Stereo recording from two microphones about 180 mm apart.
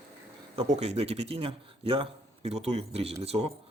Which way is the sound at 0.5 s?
35° right (ahead or behind).